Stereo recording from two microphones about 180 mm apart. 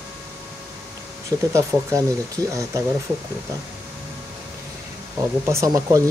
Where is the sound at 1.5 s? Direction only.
15° right (ahead or behind).